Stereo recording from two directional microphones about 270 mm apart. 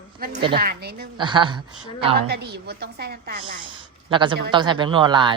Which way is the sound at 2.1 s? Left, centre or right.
Right.